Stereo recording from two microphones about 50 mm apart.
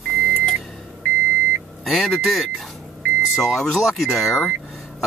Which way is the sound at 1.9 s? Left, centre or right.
Centre.